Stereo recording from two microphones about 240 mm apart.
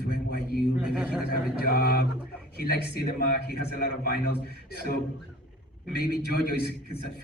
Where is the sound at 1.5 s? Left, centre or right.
Left.